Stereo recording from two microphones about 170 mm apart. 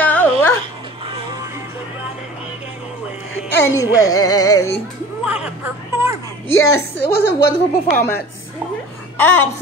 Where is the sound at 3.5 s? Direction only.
20° left (ahead or behind).